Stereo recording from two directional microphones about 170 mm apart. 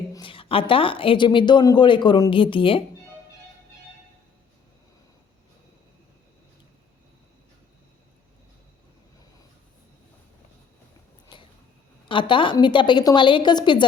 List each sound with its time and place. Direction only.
0.1 s a woman's voice: 30° left (ahead or behind)
11.3 s a sound: 30° left (ahead or behind)
12.0 s a woman's voice: 30° left (ahead or behind)